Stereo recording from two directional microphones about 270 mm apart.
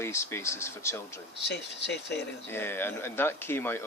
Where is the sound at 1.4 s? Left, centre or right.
Left.